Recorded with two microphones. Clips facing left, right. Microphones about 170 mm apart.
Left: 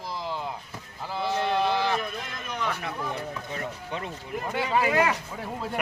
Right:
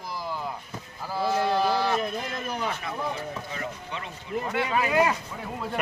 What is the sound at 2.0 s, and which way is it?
Speech, 30° right (ahead or behind).